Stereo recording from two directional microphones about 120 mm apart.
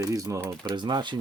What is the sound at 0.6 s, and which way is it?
Speech, 40° right (ahead or behind).